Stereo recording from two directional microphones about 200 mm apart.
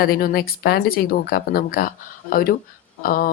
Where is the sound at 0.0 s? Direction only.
45° left (ahead or behind).